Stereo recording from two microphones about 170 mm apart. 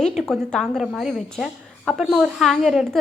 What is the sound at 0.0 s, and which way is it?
A woman's voice, centre (ahead or behind).